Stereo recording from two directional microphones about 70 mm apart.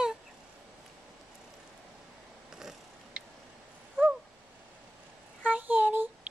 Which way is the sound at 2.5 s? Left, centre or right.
Centre.